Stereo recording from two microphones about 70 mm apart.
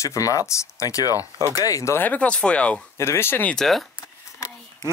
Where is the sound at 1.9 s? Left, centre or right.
Left.